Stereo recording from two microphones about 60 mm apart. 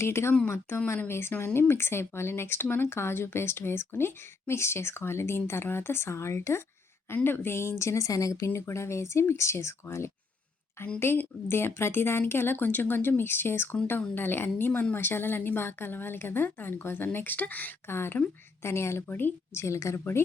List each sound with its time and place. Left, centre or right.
0.0 s speech: left
8.4 s speech: left
11.0 s a woman's voice: left
17.8 s a woman's voice: left
19.0 s a woman's voice: left
19.5 s speech: left